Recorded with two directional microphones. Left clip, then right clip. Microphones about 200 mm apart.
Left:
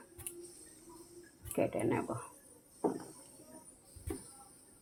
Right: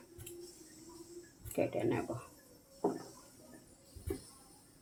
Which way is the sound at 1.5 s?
15° left (ahead or behind).